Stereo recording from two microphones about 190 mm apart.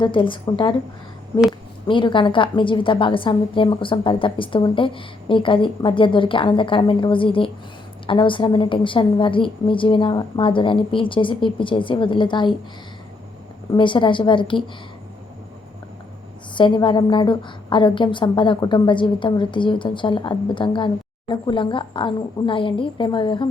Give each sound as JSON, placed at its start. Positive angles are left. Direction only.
{"t": 0.0, "sound": "a woman's voice", "side_deg": 25}
{"t": 1.9, "sound": "a woman's voice", "side_deg": 25}
{"t": 13.7, "sound": "a woman's voice", "side_deg": 25}
{"t": 16.6, "sound": "a woman's voice", "side_deg": 25}